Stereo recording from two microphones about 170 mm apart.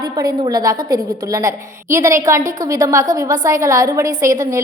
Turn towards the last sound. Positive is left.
turn(degrees=-20)  # may be behind; listen again after turning